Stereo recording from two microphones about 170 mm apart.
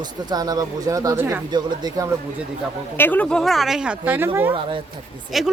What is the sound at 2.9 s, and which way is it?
Speech, 10° left (ahead or behind).